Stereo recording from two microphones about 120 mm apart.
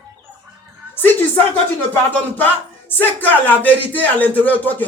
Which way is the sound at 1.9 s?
15° left (ahead or behind).